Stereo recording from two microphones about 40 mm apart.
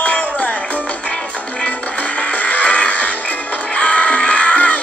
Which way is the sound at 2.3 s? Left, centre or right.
Left.